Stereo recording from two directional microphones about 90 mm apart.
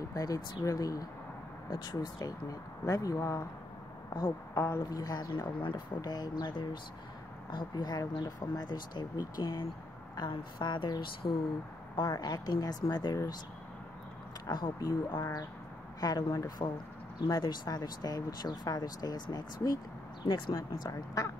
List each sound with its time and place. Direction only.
0.1 s speech: 45° left (ahead or behind)
5.3 s speech: 65° left (ahead or behind)
10.3 s speech: 60° left (ahead or behind)
11.9 s speech: 50° left (ahead or behind)
14.4 s speech: 45° left (ahead or behind)
20.5 s speech: 40° left (ahead or behind)